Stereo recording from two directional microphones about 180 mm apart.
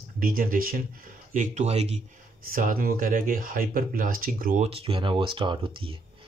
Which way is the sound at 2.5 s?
50° right (ahead or behind).